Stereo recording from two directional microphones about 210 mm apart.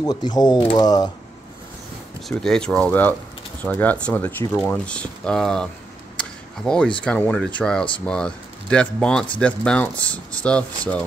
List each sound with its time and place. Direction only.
0.0 s speech: 20° left (ahead or behind)
2.2 s speech: centre (ahead or behind)
6.1 s a sound: 5° left (ahead or behind)
7.1 s speech: 5° left (ahead or behind)